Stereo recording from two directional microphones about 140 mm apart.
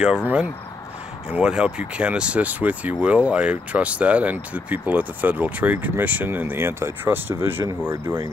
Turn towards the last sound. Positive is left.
turn(degrees=-15)  # may be behind; listen again after turning